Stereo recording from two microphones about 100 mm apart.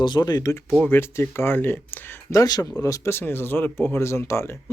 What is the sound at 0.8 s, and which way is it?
Speech, 20° left (ahead or behind).